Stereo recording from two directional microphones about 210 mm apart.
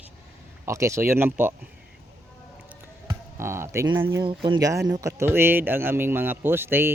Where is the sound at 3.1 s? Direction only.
10° right (ahead or behind).